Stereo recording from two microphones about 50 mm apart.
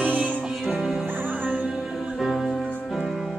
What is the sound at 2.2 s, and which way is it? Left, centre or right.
Music, centre.